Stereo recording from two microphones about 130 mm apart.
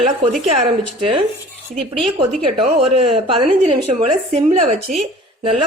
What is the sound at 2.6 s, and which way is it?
Speech, 50° right (ahead or behind).